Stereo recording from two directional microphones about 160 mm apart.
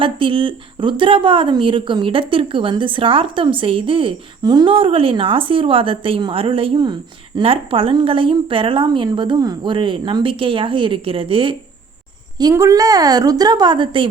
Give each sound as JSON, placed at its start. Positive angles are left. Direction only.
{"t": 0.0, "sound": "speech", "side_deg": -35}
{"t": 12.4, "sound": "a woman's voice", "side_deg": -20}